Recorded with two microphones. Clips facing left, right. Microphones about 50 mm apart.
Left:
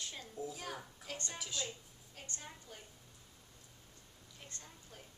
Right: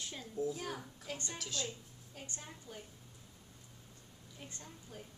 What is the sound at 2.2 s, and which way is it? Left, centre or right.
Speech, centre.